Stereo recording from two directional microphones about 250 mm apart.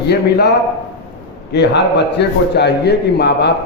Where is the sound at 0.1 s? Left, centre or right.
Left.